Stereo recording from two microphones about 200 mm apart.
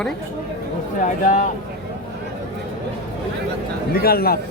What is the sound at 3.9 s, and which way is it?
Speech, 50° left (ahead or behind).